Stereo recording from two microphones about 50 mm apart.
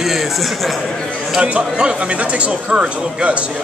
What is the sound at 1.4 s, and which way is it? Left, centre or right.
Speech, right.